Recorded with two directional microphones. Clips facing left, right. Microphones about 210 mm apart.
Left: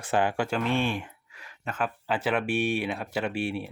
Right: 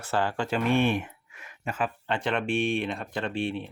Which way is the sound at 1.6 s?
5° right (ahead or behind).